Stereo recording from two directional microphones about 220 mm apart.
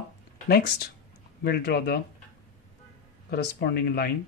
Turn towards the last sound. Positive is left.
turn(degrees=45)  # may be behind; listen again after turning